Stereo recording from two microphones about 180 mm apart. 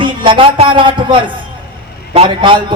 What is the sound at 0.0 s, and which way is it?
A man's voice, 25° right (ahead or behind).